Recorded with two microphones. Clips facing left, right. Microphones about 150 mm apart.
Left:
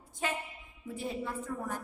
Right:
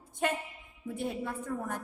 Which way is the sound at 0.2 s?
60° right (ahead or behind).